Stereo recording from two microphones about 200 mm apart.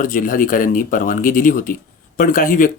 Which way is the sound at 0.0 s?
40° left (ahead or behind).